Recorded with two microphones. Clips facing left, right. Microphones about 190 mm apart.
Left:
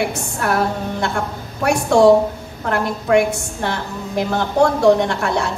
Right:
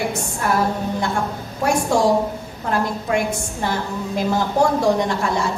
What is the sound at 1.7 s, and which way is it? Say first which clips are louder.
A woman's voice: left 6 dB; 65° left (ahead or behind).